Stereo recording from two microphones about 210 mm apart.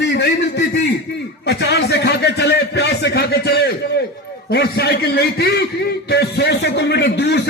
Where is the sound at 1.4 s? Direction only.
50° left (ahead or behind).